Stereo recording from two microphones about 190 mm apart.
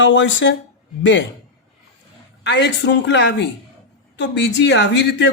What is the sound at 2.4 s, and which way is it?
Speech, 65° left (ahead or behind).